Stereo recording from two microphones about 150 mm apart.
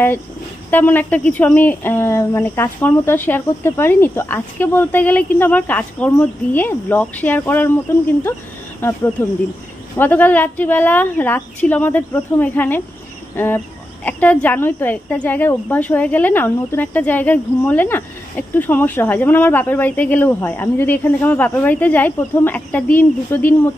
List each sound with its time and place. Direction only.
0.7 s a woman's voice: 10° left (ahead or behind)
8.8 s a woman's voice: 15° left (ahead or behind)